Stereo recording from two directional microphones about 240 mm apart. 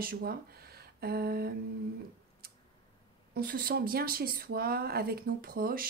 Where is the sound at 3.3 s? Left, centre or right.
Right.